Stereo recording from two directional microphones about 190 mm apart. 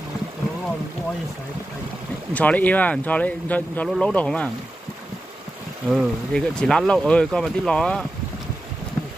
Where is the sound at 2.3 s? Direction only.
10° left (ahead or behind).